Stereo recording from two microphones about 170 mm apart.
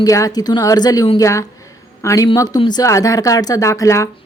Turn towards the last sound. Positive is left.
turn(degrees=15)  # may be behind; listen again after turning